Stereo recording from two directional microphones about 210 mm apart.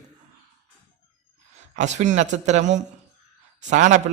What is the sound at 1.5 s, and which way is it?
A man's voice, 35° right (ahead or behind).